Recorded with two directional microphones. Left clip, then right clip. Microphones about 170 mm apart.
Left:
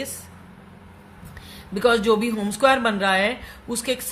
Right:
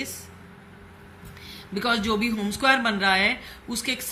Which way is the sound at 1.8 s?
65° left (ahead or behind).